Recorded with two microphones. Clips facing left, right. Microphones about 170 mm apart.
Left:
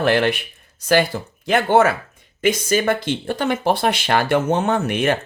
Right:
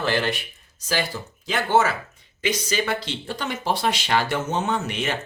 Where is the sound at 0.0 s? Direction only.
60° left (ahead or behind).